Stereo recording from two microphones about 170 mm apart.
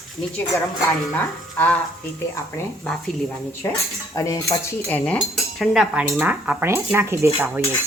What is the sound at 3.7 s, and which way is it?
Cutlery, 20° left (ahead or behind).